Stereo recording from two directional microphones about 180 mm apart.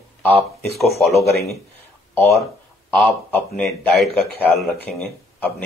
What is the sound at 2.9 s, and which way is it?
A man's voice, 10° left (ahead or behind).